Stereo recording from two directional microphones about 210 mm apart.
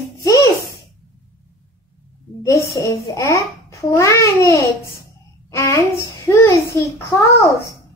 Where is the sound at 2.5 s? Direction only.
15° left (ahead or behind).